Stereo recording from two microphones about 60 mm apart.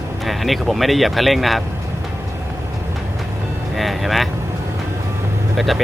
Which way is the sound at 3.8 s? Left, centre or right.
Centre.